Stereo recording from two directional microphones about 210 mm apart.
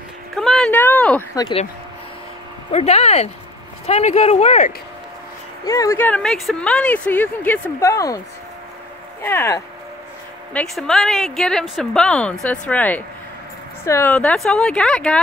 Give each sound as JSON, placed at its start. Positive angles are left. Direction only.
{"t": 0.4, "sound": "a sound", "side_deg": 5}
{"t": 1.3, "sound": "speech", "side_deg": 20}
{"t": 2.7, "sound": "speech", "side_deg": 30}
{"t": 5.7, "sound": "speech", "side_deg": 15}
{"t": 9.2, "sound": "speech", "side_deg": 10}